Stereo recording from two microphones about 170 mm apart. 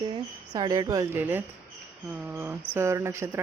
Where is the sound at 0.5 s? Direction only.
25° right (ahead or behind).